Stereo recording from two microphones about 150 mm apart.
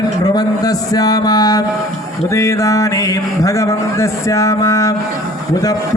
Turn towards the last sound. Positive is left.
turn(degrees=20)  # may be behind; listen again after turning